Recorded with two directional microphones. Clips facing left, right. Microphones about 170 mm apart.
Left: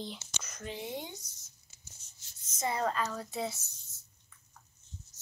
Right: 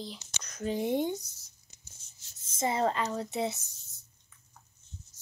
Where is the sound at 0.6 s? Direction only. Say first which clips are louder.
Right 11 dB; 45° right (ahead or behind).